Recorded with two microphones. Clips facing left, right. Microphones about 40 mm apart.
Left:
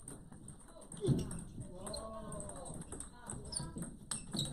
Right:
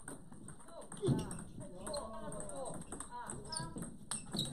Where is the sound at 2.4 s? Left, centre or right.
Centre.